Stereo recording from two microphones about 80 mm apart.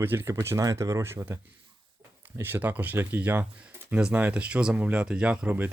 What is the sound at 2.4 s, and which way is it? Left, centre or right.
Speech, right.